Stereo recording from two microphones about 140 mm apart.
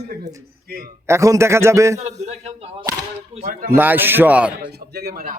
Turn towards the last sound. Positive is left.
turn(degrees=-90)